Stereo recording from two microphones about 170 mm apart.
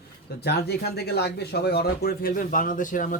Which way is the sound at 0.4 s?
70° left (ahead or behind).